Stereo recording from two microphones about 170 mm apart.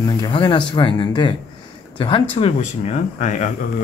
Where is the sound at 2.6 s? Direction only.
45° left (ahead or behind).